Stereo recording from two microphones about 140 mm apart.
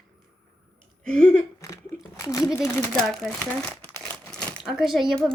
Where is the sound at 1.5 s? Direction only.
25° left (ahead or behind).